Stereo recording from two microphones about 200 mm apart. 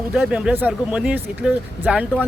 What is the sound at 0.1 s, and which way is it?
Speech, centre (ahead or behind).